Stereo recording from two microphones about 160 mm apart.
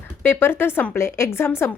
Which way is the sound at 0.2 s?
15° left (ahead or behind).